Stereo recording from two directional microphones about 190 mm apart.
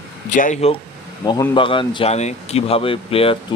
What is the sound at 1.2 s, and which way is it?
Speech, 20° left (ahead or behind).